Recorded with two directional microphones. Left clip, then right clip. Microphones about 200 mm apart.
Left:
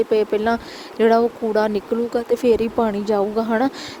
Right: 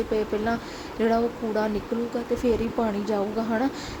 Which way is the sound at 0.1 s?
40° left (ahead or behind).